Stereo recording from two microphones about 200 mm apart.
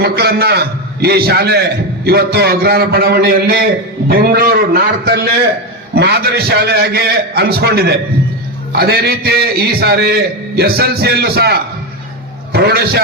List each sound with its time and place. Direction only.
0.0 s a man's voice: 50° right (ahead or behind)